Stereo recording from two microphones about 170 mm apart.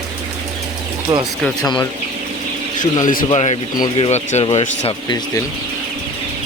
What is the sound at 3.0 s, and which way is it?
Speech, 50° left (ahead or behind).